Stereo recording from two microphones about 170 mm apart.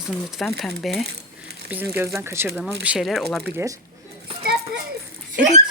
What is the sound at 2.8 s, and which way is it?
Speech, 5° right (ahead or behind).